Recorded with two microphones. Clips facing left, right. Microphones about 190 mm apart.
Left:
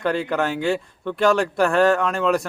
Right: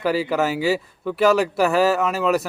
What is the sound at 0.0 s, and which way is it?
Speech, 5° right (ahead or behind).